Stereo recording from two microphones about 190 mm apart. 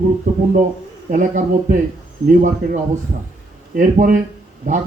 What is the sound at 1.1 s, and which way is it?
Speech, 45° right (ahead or behind).